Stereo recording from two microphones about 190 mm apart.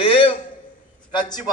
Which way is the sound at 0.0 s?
25° left (ahead or behind).